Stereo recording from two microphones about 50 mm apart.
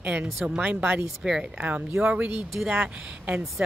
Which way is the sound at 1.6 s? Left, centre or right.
Right.